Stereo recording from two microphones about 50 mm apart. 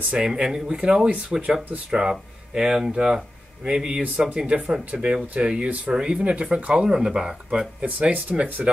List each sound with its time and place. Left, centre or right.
0.1 s speech: centre
7.8 s speech: right